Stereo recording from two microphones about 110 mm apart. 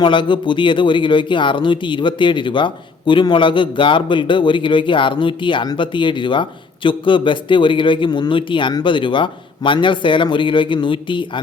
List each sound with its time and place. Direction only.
0.0 s speech: 45° left (ahead or behind)